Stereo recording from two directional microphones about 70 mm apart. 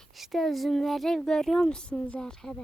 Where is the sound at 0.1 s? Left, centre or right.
Centre.